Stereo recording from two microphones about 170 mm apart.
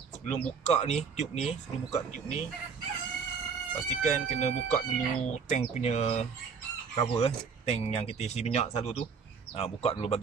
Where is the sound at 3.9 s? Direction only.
45° left (ahead or behind).